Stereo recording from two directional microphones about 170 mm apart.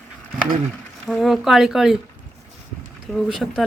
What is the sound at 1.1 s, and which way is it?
Speech, centre (ahead or behind).